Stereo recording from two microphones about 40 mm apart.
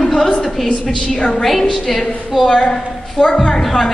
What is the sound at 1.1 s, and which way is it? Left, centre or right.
Speech, centre.